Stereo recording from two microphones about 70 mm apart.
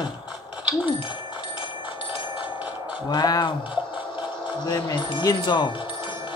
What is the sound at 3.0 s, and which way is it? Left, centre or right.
Speech, left.